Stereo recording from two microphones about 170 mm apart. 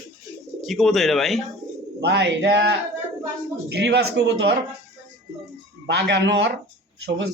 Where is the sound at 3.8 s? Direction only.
90° right.